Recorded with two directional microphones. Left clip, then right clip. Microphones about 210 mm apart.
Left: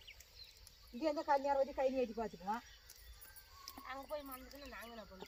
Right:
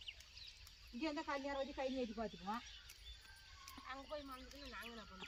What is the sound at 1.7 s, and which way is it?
Speech, centre (ahead or behind).